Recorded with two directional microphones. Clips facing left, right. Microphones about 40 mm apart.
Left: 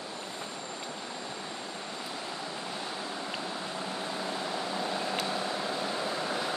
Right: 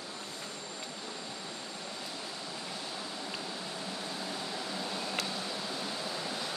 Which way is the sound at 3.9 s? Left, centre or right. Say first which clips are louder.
Left 5 dB; left.